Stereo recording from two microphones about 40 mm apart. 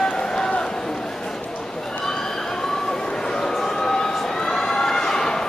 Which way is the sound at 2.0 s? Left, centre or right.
Centre.